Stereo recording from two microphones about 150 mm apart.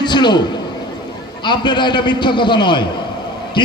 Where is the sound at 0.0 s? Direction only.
30° left (ahead or behind).